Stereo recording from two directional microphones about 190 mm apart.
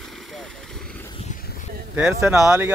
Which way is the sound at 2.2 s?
5° right (ahead or behind).